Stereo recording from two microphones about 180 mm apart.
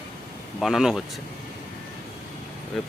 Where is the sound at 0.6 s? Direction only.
5° right (ahead or behind).